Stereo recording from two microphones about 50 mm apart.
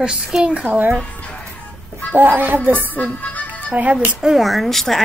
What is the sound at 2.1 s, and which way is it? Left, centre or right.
Speech, right.